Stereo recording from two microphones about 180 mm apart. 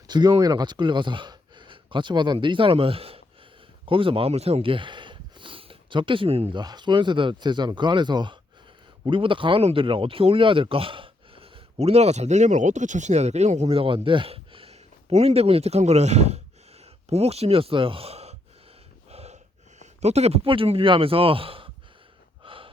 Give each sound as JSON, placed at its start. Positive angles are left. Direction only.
{"t": 0.1, "sound": "speech", "side_deg": -25}
{"t": 19.1, "sound": "snort", "side_deg": -35}
{"t": 19.8, "sound": "speech", "side_deg": -40}
{"t": 22.4, "sound": "gasp", "side_deg": -30}